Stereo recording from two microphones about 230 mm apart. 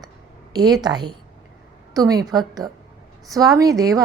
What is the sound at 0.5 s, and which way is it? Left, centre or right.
A woman's voice, centre.